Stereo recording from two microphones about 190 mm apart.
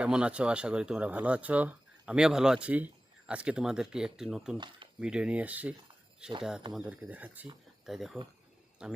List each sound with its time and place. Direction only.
0.0 s speech: 5° right (ahead or behind)
4.5 s speech: 25° right (ahead or behind)
4.9 s speech: 5° right (ahead or behind)